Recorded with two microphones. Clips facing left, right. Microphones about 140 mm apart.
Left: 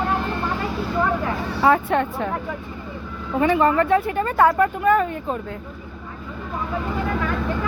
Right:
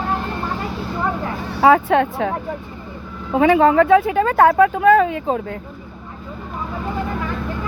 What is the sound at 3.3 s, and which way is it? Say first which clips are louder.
Speech: right 5 dB; 90° right.